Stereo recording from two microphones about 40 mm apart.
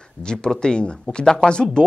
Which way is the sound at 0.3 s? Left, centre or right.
Left.